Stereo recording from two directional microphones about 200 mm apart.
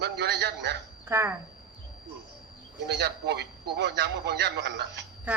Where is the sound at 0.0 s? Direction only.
55° right (ahead or behind).